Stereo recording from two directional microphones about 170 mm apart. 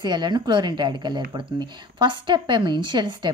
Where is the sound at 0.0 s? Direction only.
25° right (ahead or behind).